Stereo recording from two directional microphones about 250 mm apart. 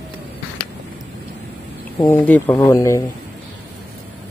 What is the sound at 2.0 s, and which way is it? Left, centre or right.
Speech, centre.